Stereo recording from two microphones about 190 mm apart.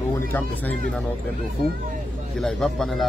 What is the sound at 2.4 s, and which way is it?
Speech, centre (ahead or behind).